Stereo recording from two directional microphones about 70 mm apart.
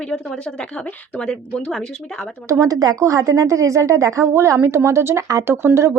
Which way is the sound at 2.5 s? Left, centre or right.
Right.